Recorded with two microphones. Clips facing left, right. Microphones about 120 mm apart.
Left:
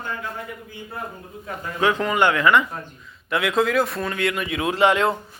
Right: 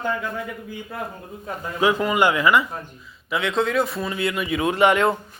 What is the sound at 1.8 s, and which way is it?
Speech, 10° right (ahead or behind).